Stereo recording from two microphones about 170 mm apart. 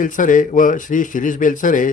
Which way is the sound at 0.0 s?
50° left (ahead or behind).